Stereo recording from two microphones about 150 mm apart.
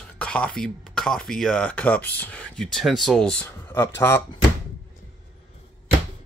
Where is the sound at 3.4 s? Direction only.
15° left (ahead or behind).